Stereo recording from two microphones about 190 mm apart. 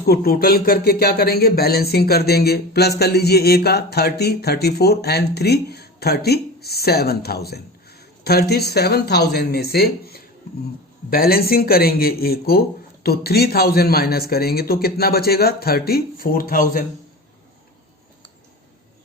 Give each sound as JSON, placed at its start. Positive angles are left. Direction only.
{"t": 0.0, "sound": "speech", "side_deg": 55}